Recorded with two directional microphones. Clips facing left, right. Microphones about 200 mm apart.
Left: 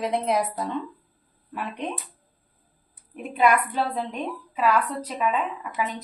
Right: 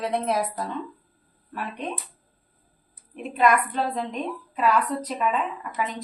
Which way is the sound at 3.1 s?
5° left (ahead or behind).